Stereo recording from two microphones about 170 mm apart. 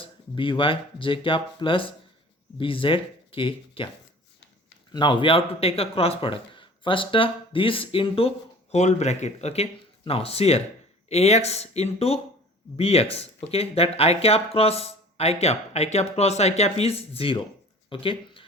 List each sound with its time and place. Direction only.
0.0 s speech: 30° left (ahead or behind)
4.9 s speech: 25° left (ahead or behind)